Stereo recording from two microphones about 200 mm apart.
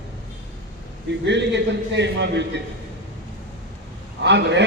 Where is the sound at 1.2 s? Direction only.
60° right (ahead or behind).